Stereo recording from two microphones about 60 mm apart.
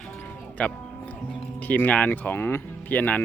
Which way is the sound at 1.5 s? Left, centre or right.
Left.